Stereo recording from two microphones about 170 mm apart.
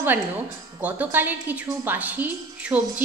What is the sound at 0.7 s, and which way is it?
A woman's voice, 10° right (ahead or behind).